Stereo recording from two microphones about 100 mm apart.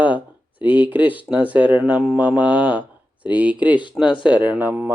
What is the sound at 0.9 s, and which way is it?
Speech, 15° right (ahead or behind).